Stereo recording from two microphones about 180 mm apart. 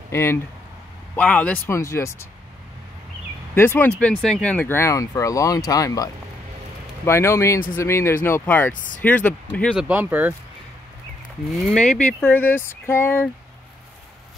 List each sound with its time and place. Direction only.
0.1 s speech: 15° left (ahead or behind)
3.5 s speech: 10° left (ahead or behind)
7.1 s speech: 15° left (ahead or behind)
9.8 s speech: 10° right (ahead or behind)
11.5 s speech: centre (ahead or behind)